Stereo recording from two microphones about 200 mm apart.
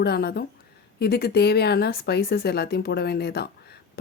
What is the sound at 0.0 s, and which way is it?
Speech, 55° left (ahead or behind).